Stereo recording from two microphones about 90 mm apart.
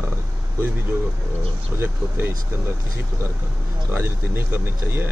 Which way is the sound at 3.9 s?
25° right (ahead or behind).